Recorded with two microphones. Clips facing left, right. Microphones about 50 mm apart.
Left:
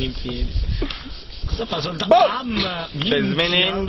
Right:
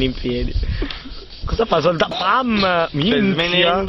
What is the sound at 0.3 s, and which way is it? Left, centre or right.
Speech, centre.